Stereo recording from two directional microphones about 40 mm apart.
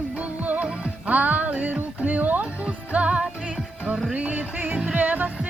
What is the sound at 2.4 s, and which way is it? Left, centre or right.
Music, right.